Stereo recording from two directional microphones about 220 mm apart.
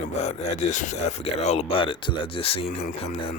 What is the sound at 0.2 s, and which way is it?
Speech, 30° left (ahead or behind).